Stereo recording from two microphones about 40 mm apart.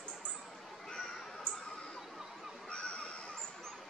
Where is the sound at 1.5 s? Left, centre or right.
Left.